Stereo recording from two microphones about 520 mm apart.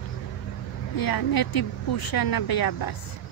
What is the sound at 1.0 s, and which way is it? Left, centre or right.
Speech, left.